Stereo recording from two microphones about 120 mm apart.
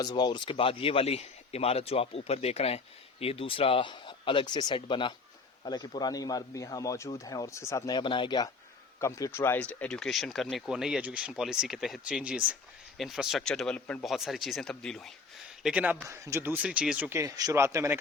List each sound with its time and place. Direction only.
0.0 s a man's voice: 35° left (ahead or behind)
7.9 s speech: 45° left (ahead or behind)
9.0 s speech: 25° left (ahead or behind)
14.0 s speech: centre (ahead or behind)
15.6 s speech: 10° right (ahead or behind)
16.0 s speech: 25° right (ahead or behind); by 17.1 s 10° right (ahead or behind)
17.1 s speech: 25° right (ahead or behind)